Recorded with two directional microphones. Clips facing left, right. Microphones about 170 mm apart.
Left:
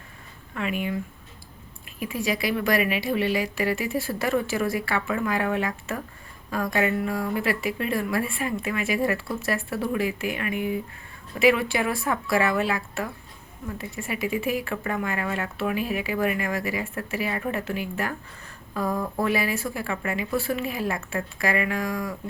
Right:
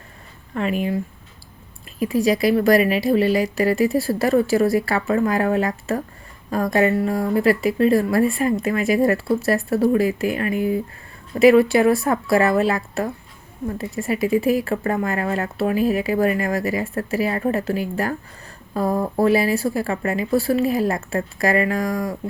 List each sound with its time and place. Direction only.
0.5 s speech: 35° right (ahead or behind)
2.0 s speech: 35° right (ahead or behind)